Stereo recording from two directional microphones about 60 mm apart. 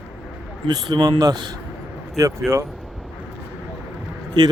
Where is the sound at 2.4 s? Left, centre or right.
Centre.